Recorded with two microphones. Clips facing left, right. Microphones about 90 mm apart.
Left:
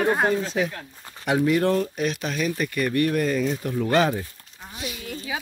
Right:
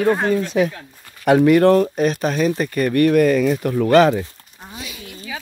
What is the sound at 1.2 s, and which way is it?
Speech, 60° right (ahead or behind).